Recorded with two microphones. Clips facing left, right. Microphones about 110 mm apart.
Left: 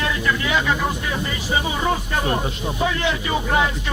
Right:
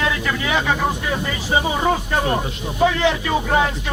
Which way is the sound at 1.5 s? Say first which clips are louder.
Right 4 dB; 35° right (ahead or behind).